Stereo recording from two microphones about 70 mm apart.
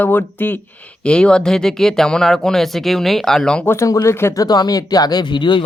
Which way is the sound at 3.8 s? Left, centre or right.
Left.